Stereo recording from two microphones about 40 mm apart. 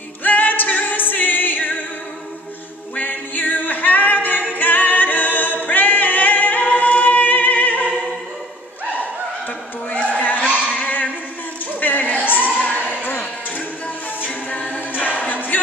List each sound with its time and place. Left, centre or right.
0.2 s music: left
3.0 s a capella: left
10.1 s crowd: left
10.7 s a sound: left
14.2 s a capella: left